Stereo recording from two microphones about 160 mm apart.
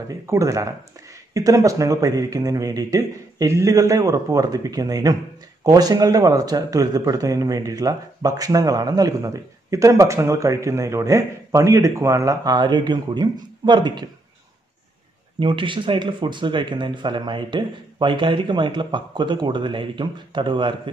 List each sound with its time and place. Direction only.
0.1 s speech: 20° right (ahead or behind)
15.3 s speech: 30° right (ahead or behind)